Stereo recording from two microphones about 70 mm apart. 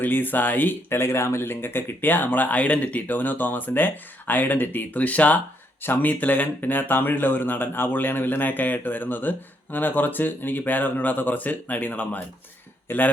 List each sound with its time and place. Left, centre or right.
0.0 s speech: left
12.9 s a man's voice: left